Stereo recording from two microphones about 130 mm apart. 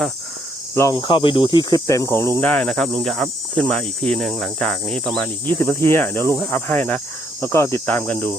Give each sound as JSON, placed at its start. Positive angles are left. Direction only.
{"t": 0.7, "sound": "cricket", "side_deg": 20}
{"t": 0.9, "sound": "snake", "side_deg": 40}
{"t": 1.5, "sound": "snake", "side_deg": 30}
{"t": 2.4, "sound": "cricket", "side_deg": 10}
{"t": 5.5, "sound": "cricket", "side_deg": 15}